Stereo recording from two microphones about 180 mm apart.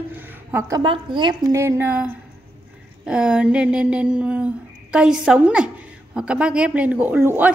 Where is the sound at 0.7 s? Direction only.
25° right (ahead or behind).